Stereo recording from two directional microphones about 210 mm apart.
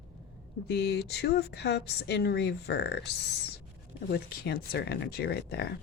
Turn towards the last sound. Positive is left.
turn(degrees=50)  # may be behind; listen again after turning